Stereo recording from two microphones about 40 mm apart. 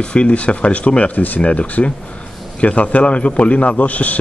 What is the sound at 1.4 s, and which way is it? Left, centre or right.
A man's voice, left.